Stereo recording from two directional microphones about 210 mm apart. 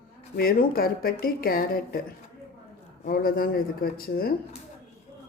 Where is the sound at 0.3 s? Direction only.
45° left (ahead or behind).